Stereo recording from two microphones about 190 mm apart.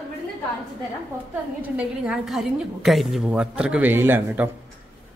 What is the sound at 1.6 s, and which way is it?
A woman's voice, 5° right (ahead or behind).